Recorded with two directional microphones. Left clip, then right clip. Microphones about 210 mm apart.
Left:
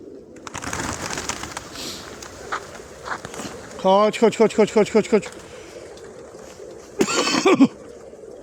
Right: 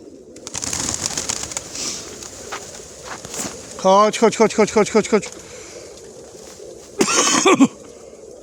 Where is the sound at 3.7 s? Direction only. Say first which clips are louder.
Right 3 dB; 5° right (ahead or behind).